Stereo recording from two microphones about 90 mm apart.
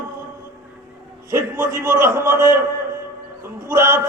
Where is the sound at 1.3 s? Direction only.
25° right (ahead or behind).